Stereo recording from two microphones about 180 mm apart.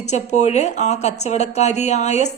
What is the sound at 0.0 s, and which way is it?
Speech, 40° left (ahead or behind).